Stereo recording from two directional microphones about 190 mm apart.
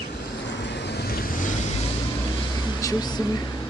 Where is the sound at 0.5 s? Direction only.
65° left (ahead or behind); by 1.5 s 45° left (ahead or behind).